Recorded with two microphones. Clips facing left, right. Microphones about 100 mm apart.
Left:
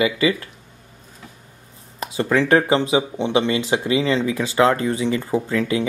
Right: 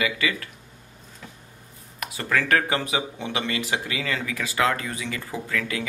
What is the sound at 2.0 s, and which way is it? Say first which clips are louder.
Speech: left 7 dB; 25° left (ahead or behind).